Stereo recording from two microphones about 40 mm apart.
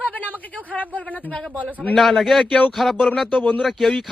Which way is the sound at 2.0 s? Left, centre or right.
Centre.